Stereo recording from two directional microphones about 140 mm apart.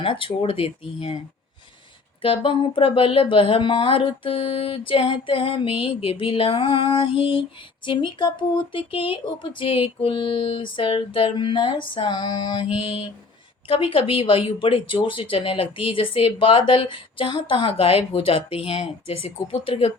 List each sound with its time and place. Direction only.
0.0 s speech: 40° left (ahead or behind)
2.2 s speech: 40° left (ahead or behind)